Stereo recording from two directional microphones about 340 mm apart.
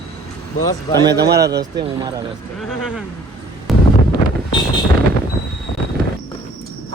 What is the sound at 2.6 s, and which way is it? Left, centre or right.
Speech, centre.